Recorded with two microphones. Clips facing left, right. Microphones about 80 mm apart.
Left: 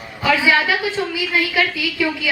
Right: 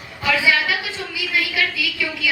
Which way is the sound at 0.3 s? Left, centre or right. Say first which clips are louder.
Left 3 dB; left.